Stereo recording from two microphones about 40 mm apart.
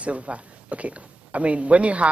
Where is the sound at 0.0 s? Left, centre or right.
Right.